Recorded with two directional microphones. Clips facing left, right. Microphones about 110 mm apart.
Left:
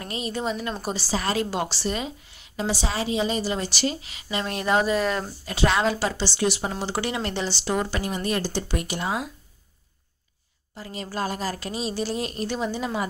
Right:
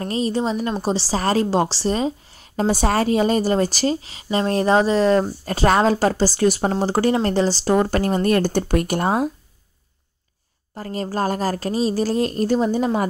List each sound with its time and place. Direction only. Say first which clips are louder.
0.0 s a woman's voice: right 7 dB; 35° right (ahead or behind)
5.4 s speech: right 6 dB; 45° right (ahead or behind)
10.7 s a woman's voice: right 8 dB; 45° right (ahead or behind)